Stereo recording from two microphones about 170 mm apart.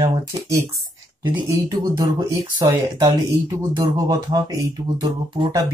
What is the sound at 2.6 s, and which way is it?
Speech, 20° right (ahead or behind).